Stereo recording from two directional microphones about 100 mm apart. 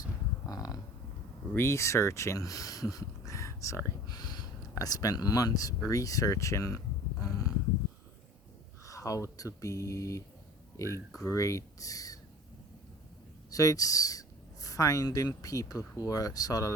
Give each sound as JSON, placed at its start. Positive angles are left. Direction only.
{"t": 0.0, "sound": "a sound", "side_deg": 35}
{"t": 1.5, "sound": "speech", "side_deg": 25}
{"t": 4.0, "sound": "speech", "side_deg": 40}
{"t": 8.9, "sound": "speech", "side_deg": 35}
{"t": 13.5, "sound": "speech", "side_deg": 35}